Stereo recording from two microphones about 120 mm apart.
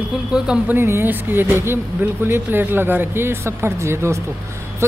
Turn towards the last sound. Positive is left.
turn(degrees=-20)  # may be behind; listen again after turning